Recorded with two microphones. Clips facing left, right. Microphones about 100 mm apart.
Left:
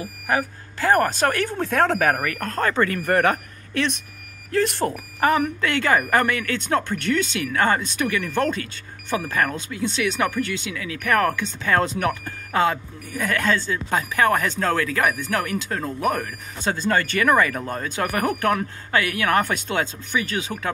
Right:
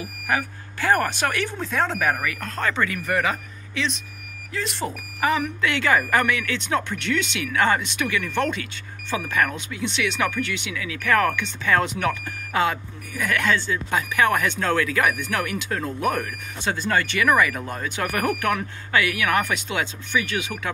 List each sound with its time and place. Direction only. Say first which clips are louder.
0.0 s speech: left 2 dB; 30° left (ahead or behind); by 2.1 s 60° left (ahead or behind)
2.2 s speech: left 3 dB; 45° left (ahead or behind)
18.0 s speech: left 2 dB; 25° left (ahead or behind)